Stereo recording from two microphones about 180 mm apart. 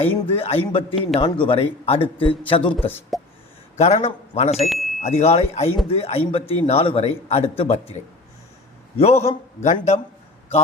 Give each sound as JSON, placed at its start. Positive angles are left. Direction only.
{"t": 0.1, "sound": "a man's voice", "side_deg": 30}
{"t": 3.1, "sound": "a sound", "side_deg": 0}
{"t": 3.8, "sound": "speech", "side_deg": 35}
{"t": 4.7, "sound": "chime", "side_deg": 0}
{"t": 4.9, "sound": "speech", "side_deg": 35}